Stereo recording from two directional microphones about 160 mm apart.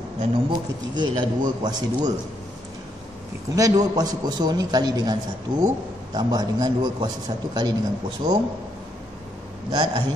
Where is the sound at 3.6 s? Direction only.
20° right (ahead or behind).